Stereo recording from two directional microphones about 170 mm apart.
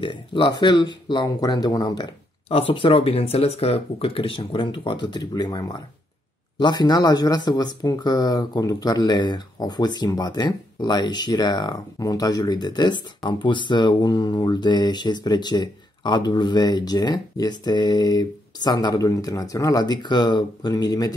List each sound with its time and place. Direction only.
0.0 s speech: 30° left (ahead or behind)